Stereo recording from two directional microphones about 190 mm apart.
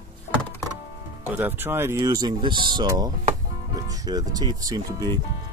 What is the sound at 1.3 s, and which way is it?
Speech, 10° right (ahead or behind).